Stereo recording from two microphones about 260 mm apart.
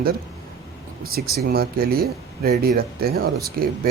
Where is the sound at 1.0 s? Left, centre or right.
Right.